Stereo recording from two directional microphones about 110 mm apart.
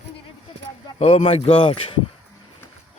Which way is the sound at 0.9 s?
80° left.